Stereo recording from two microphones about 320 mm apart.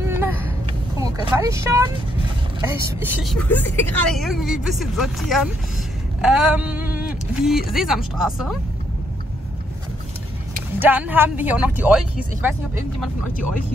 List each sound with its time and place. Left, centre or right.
0.1 s vehicle: centre
0.9 s speech: centre
3.3 s speech: centre
10.8 s speech: centre